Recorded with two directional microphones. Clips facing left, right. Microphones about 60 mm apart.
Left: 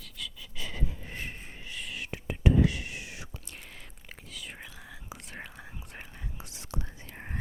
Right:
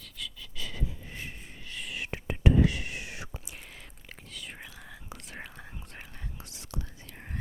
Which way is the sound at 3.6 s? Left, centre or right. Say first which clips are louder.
Even; centre.